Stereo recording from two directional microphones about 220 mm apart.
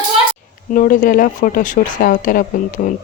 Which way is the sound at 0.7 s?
35° left (ahead or behind).